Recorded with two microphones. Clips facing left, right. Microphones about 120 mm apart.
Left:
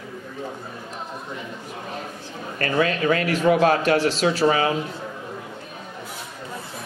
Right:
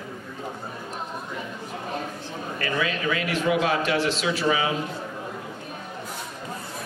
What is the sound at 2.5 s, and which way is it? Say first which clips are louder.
A man's voice: left 6 dB; 45° left (ahead or behind).